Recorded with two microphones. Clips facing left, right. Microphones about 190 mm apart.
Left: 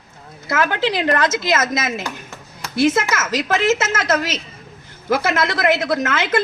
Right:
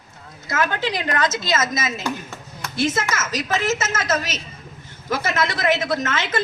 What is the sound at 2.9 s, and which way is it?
A woman's voice, 60° left (ahead or behind).